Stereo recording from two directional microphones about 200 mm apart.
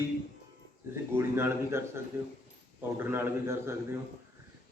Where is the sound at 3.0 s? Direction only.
10° right (ahead or behind).